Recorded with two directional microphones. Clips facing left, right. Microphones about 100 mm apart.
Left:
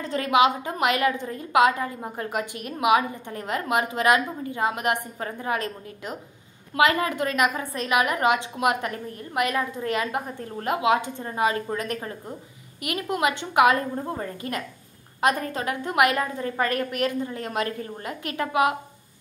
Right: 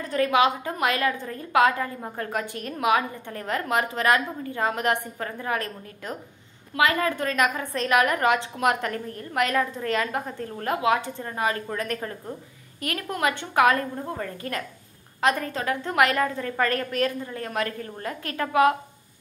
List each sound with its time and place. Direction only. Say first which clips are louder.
0.0 s a woman's voice: left 1 dB; 25° left (ahead or behind)
15.4 s a woman's voice: even; 25° left (ahead or behind)
15.8 s a woman's voice: even; 15° left (ahead or behind)